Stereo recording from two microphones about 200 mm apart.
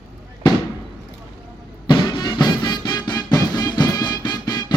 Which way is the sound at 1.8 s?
25° left (ahead or behind).